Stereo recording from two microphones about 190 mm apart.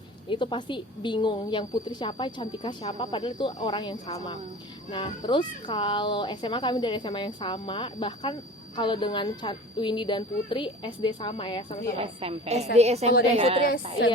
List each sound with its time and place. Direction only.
0.3 s speech: 25° left (ahead or behind)
11.9 s a woman's voice: 30° right (ahead or behind)